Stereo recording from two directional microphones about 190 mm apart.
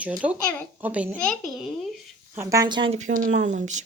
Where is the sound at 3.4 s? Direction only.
40° right (ahead or behind).